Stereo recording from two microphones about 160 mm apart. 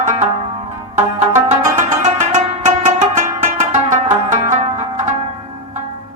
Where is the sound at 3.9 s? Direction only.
50° right (ahead or behind).